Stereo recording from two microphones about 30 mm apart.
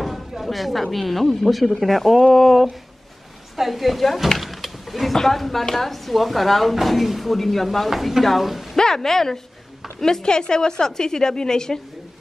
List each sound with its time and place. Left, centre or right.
0.4 s a woman's voice: centre
5.1 s speech: centre
8.7 s speech: centre
10.2 s a woman's voice: left